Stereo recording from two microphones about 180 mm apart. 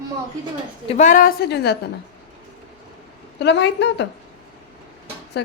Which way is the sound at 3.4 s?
75° left (ahead or behind).